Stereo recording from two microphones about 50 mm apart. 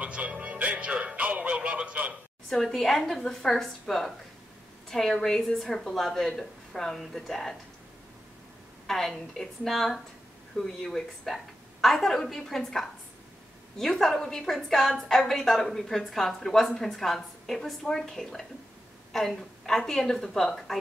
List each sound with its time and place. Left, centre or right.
0.0 s music: right
2.5 s a woman's voice: centre
8.8 s a woman's voice: centre